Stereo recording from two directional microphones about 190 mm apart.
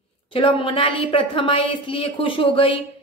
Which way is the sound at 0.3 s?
30° left (ahead or behind).